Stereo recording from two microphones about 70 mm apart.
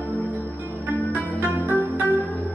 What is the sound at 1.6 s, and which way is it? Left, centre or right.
Music, left.